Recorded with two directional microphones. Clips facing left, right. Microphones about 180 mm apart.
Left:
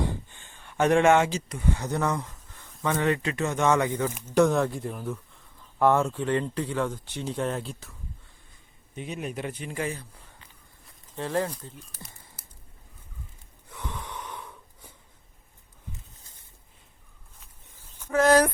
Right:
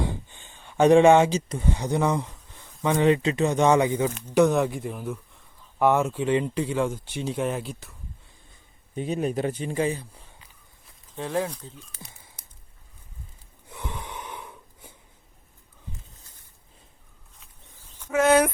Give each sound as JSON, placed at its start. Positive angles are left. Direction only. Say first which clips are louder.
{"t": 0.3, "sound": "speech", "louder": "right 6 dB", "side_deg": -20}
{"t": 4.4, "sound": "speech", "louder": "right 2 dB", "side_deg": 0}
{"t": 9.0, "sound": "speech", "louder": "right 7 dB", "side_deg": -35}
{"t": 11.3, "sound": "speech", "louder": "right 1 dB", "side_deg": 0}
{"t": 13.7, "sound": "snort", "louder": "right 1 dB", "side_deg": -15}
{"t": 18.1, "sound": "speech", "louder": "even", "side_deg": -5}